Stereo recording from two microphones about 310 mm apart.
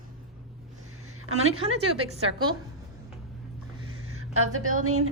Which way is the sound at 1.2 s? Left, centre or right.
Right.